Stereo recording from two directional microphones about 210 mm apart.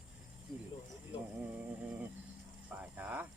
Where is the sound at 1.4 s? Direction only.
5° right (ahead or behind).